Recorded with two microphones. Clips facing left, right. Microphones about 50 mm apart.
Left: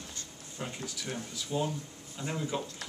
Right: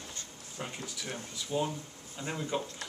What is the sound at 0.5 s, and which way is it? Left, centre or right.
Speech, centre.